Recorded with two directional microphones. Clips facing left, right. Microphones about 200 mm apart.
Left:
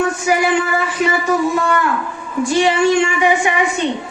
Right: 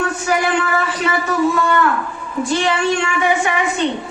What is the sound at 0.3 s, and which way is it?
Speech, 15° left (ahead or behind).